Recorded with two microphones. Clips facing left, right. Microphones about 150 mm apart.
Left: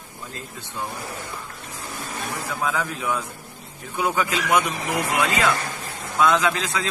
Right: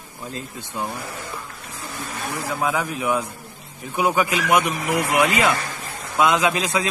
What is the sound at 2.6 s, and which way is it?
A man's voice, 15° right (ahead or behind).